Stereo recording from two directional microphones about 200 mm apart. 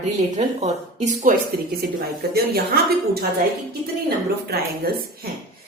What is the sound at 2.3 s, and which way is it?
Speech, 50° right (ahead or behind).